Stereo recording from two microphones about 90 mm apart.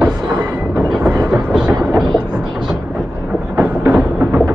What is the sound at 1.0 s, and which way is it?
Vehicle, 30° right (ahead or behind).